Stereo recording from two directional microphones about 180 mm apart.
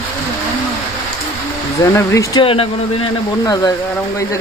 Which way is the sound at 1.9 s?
15° left (ahead or behind).